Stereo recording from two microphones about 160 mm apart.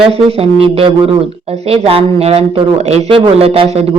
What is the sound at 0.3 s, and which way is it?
Speech, 35° right (ahead or behind).